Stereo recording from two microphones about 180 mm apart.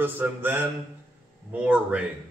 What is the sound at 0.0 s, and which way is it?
Speech, 10° right (ahead or behind).